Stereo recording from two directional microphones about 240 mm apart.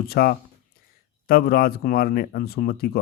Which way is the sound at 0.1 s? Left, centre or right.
Left.